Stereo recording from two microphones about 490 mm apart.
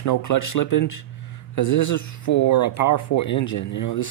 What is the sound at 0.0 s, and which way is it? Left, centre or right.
Speech, left.